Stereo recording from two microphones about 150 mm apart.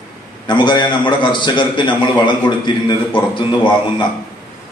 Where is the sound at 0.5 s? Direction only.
30° left (ahead or behind).